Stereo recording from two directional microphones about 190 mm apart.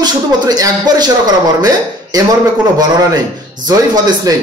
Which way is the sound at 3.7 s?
20° right (ahead or behind).